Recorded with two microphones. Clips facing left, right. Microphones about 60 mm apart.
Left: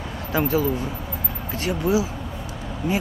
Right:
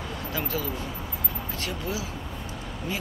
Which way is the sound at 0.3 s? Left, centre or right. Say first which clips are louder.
Left 11 dB; left.